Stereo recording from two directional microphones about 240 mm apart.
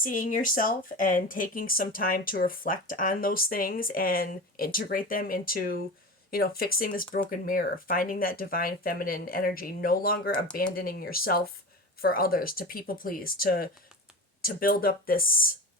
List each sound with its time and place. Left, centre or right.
0.0 s speech: left